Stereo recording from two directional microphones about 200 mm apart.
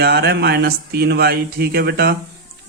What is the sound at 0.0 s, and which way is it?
Speech, 55° right (ahead or behind).